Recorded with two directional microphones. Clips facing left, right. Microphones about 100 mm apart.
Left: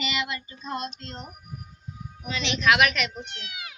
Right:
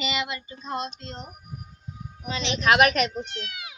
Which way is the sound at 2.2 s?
30° right (ahead or behind).